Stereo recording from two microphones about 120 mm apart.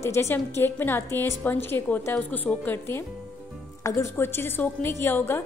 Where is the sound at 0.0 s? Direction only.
20° left (ahead or behind).